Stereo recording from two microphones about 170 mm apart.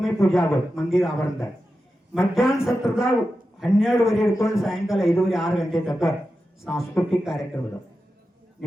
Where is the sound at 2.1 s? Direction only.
Centre (ahead or behind).